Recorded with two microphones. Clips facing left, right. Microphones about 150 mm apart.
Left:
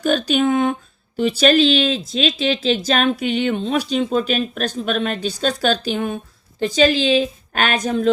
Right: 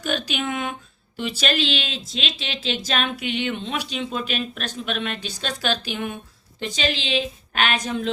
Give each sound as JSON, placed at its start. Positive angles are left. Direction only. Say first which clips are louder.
{"t": 0.0, "sound": "a woman's voice", "louder": "left 9 dB", "side_deg": 40}